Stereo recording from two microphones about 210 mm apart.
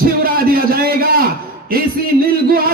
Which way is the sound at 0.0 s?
45° right (ahead or behind).